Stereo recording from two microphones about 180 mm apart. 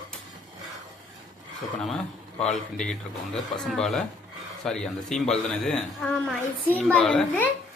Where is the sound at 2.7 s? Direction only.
5° left (ahead or behind).